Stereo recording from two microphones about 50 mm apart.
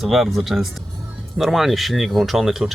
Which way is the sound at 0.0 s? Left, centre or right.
Centre.